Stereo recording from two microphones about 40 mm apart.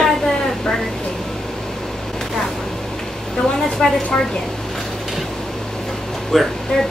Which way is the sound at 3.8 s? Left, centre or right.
Left.